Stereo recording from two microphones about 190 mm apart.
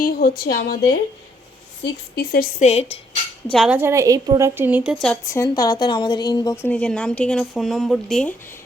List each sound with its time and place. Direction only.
0.0 s a woman's voice: 50° left (ahead or behind); by 3.0 s 35° left (ahead or behind)
3.5 s speech: centre (ahead or behind)
3.8 s a woman's voice: 15° right (ahead or behind)
5.3 s speech: 20° left (ahead or behind)
6.7 s speech: 5° left (ahead or behind)